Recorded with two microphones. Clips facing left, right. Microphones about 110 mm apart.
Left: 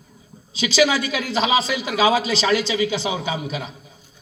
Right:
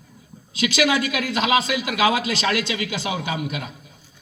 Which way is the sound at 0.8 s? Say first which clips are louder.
Left 2 dB; 30° left (ahead or behind).